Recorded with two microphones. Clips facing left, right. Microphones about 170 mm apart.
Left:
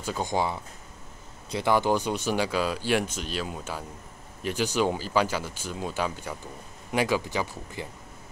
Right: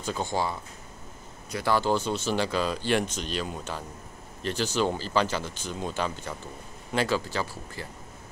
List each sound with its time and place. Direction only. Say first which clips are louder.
0.0 s speech: left 1 dB; 10° left (ahead or behind)